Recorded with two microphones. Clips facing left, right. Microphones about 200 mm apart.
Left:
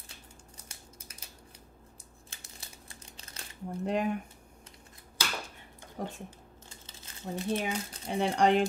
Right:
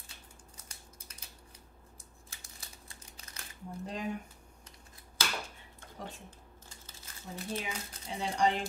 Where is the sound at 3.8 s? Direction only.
65° left (ahead or behind).